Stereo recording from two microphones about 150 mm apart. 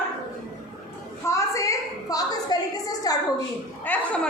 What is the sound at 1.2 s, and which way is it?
A woman's voice, 20° left (ahead or behind).